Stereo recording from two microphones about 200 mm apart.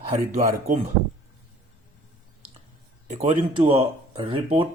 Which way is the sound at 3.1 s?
30° right (ahead or behind).